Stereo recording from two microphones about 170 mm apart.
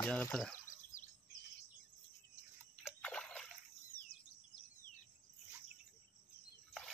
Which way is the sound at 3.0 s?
5° left (ahead or behind).